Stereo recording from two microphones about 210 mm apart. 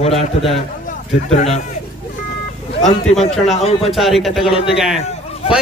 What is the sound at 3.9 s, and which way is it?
Speech, centre (ahead or behind).